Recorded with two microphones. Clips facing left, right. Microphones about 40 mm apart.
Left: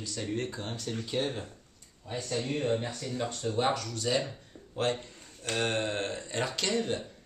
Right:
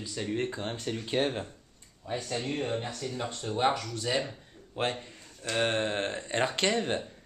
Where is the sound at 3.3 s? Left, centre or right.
Centre; by 7.0 s right.